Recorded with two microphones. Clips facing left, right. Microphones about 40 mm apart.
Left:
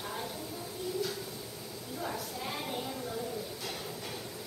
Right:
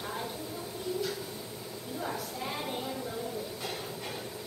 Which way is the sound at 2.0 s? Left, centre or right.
Centre.